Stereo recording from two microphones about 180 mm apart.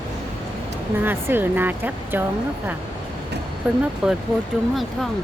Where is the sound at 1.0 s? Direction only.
10° right (ahead or behind).